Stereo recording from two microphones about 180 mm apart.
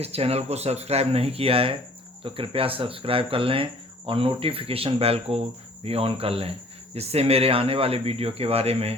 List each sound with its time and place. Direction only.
0.0 s speech: 35° right (ahead or behind)